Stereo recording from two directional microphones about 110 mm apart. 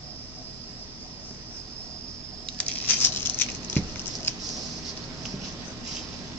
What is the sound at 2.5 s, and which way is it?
Patter, 10° left (ahead or behind).